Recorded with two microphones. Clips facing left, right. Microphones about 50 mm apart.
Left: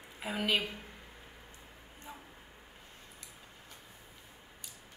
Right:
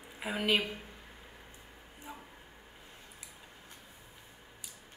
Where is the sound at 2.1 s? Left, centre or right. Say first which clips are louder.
Right 2 dB; centre.